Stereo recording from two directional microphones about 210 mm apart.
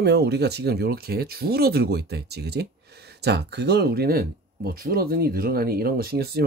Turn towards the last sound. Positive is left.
turn(degrees=-50)  # may be behind; listen again after turning